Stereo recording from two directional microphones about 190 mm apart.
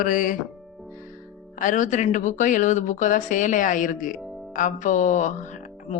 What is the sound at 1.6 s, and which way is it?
A woman's voice, 40° left (ahead or behind).